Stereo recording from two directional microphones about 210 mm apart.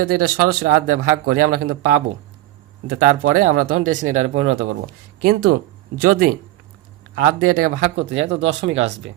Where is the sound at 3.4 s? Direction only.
40° right (ahead or behind).